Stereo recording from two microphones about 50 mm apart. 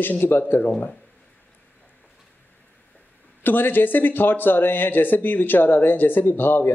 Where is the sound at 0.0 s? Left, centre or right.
Left.